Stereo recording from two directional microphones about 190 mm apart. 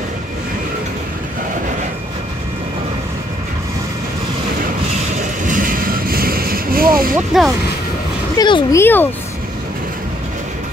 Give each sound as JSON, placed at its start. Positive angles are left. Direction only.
{"t": 5.5, "sound": "vehicle", "side_deg": -45}
{"t": 7.2, "sound": "speech", "side_deg": -5}
{"t": 8.4, "sound": "speech", "side_deg": 25}
{"t": 8.7, "sound": "speech", "side_deg": 10}